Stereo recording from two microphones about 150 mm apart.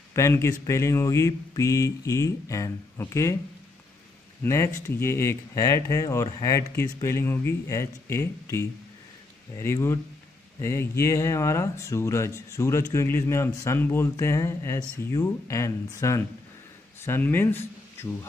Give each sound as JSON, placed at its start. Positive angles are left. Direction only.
{"t": 0.1, "sound": "speech", "side_deg": 20}
{"t": 4.4, "sound": "speech", "side_deg": 20}